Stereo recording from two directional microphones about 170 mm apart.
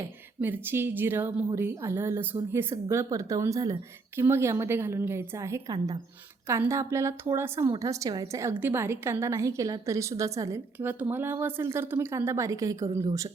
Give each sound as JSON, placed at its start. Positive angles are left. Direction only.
{"t": 0.0, "sound": "a woman's voice", "side_deg": -10}